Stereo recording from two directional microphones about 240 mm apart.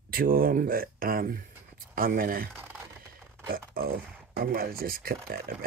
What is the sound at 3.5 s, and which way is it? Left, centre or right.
Speech, right.